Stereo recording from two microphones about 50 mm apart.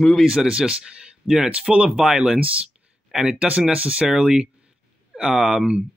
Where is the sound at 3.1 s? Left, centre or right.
Centre.